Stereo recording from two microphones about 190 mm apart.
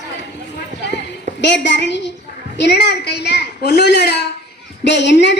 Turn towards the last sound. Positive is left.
turn(degrees=65)  # may be behind; listen again after turning